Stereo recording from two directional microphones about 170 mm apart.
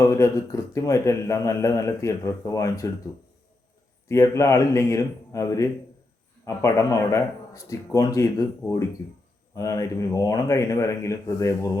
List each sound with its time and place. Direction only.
0.0 s a man's voice: 15° left (ahead or behind)
4.1 s a man's voice: 15° left (ahead or behind)